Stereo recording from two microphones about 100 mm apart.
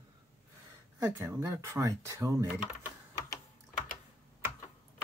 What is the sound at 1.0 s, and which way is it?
Speech, 25° right (ahead or behind).